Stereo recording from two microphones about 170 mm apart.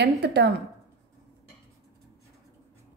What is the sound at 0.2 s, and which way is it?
Speech, 80° right.